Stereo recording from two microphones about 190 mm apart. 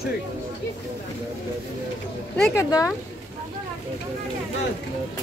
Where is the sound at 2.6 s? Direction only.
15° left (ahead or behind).